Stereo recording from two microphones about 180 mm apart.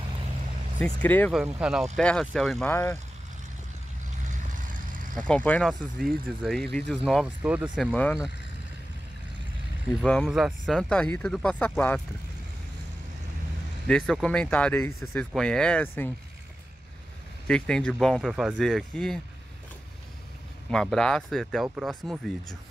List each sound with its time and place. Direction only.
1.0 s speech: 10° left (ahead or behind)
1.3 s speech: 5° right (ahead or behind)
4.3 s vehicle: 45° right (ahead or behind)
5.1 s speech: 5° left (ahead or behind)
10.3 s speech: centre (ahead or behind)
13.8 s speech: 5° left (ahead or behind)
17.5 s speech: 5° left (ahead or behind)
20.7 s speech: 5° left (ahead or behind)